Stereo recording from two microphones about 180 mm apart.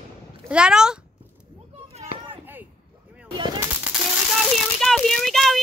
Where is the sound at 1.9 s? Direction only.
35° right (ahead or behind).